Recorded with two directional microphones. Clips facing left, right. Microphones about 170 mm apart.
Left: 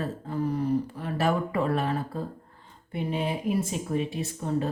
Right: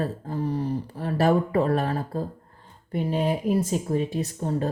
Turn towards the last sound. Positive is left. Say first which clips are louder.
# right 2 dB
turn(degrees=-40)  # may be behind; listen again after turning